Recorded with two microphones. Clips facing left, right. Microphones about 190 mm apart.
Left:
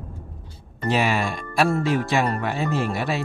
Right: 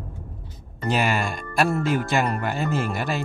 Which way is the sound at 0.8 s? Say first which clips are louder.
Left 1 dB; centre (ahead or behind).